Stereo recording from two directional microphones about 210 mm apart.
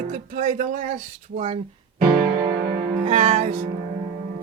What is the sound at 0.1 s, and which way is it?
Speech, 40° right (ahead or behind).